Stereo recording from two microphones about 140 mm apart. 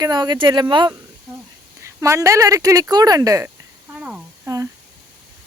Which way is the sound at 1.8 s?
20° right (ahead or behind).